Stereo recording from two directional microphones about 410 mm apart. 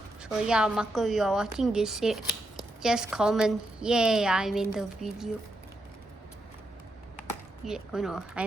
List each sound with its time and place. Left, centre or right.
0.2 s a woman's voice: centre
7.6 s a woman's voice: centre